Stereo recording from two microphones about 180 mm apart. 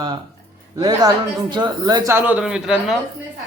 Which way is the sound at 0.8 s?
20° right (ahead or behind).